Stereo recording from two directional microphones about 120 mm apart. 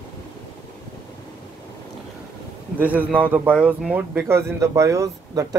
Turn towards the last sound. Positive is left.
turn(degrees=-25)  # may be behind; listen again after turning